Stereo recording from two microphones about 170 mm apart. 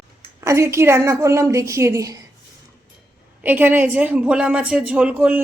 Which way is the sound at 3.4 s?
10° right (ahead or behind).